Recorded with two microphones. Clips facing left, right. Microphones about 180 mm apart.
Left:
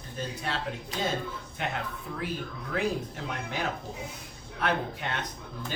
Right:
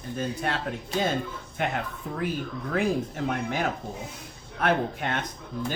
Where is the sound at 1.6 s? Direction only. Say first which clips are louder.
Right 5 dB; 50° right (ahead or behind).